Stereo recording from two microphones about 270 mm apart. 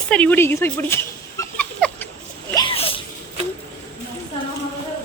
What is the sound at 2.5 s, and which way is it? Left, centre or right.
Sneeze, centre.